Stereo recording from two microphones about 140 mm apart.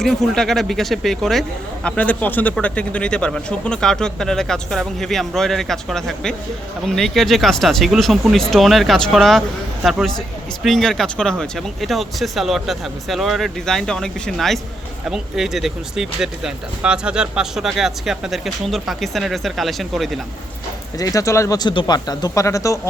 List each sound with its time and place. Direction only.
0.0 s a man's voice: 5° left (ahead or behind)
10.6 s a man's voice: centre (ahead or behind)
21.0 s speech: 25° left (ahead or behind)